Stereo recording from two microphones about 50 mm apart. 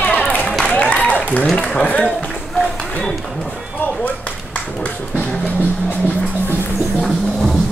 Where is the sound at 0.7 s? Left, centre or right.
Left.